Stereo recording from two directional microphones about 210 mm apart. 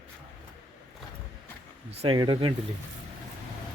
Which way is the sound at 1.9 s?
20° right (ahead or behind).